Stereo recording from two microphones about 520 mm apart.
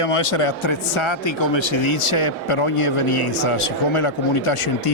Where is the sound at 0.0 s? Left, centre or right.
Left.